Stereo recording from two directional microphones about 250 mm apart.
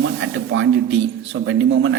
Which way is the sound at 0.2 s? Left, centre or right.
Right.